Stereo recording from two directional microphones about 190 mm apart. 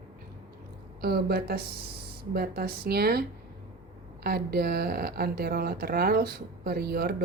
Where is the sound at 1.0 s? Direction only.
55° right (ahead or behind).